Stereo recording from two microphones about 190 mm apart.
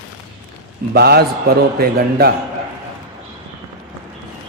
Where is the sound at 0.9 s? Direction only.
55° right (ahead or behind).